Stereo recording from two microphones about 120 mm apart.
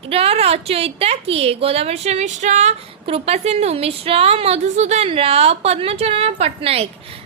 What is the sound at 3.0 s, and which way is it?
A woman's voice, 55° right (ahead or behind).